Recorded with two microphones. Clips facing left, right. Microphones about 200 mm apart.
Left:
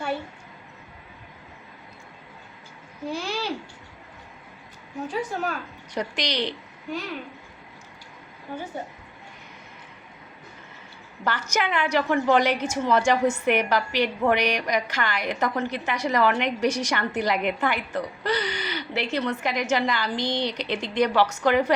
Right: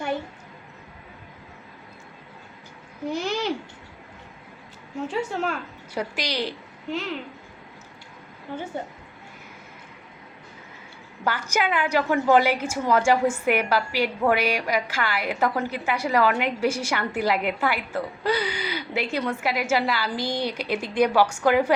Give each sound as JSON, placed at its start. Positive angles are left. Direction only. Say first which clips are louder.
{"t": 3.1, "sound": "a sound", "louder": "right 3 dB", "side_deg": -20}
{"t": 5.0, "sound": "a woman's voice", "louder": "right 2 dB", "side_deg": -25}
{"t": 5.9, "sound": "a woman's voice", "louder": "even", "side_deg": -5}
{"t": 11.2, "sound": "a woman's voice", "louder": "right 1 dB", "side_deg": -10}